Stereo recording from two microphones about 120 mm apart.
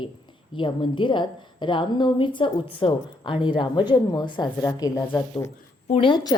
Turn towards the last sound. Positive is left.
turn(degrees=35)  # may be behind; listen again after turning